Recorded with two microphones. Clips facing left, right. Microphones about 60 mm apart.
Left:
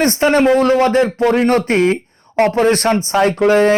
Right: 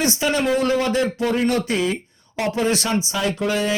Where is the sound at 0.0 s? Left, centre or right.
Left.